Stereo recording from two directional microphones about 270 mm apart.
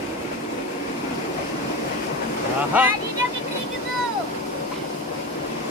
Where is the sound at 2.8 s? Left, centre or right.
Centre.